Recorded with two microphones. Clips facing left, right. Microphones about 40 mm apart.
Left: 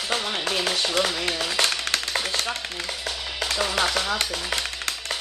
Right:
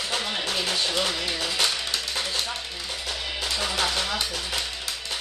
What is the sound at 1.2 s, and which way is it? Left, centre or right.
Speech, left.